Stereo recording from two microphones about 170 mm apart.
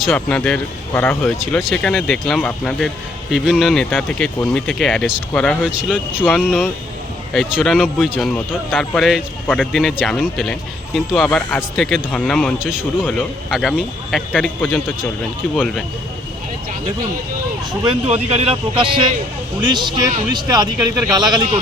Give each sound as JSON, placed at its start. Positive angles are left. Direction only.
{"t": 0.1, "sound": "speech", "side_deg": 10}
{"t": 7.3, "sound": "speech", "side_deg": 0}
{"t": 18.0, "sound": "speech", "side_deg": -35}